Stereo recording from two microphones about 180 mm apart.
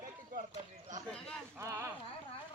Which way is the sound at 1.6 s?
15° right (ahead or behind).